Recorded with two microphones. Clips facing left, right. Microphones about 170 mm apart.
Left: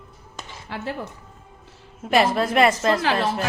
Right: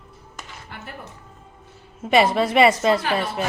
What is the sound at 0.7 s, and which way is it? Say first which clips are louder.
Speech: left 9 dB; 90° left.